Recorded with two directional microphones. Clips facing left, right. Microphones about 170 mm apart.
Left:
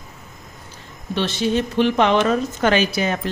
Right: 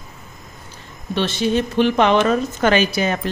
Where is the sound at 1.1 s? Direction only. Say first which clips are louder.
Right 1 dB; 55° right (ahead or behind).